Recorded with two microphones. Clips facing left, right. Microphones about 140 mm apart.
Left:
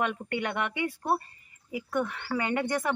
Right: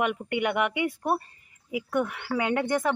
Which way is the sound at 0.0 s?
15° right (ahead or behind).